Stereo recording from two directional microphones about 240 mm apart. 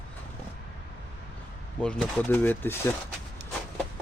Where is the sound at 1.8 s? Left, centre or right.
Centre.